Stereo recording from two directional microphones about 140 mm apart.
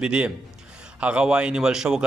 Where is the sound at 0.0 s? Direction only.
10° right (ahead or behind).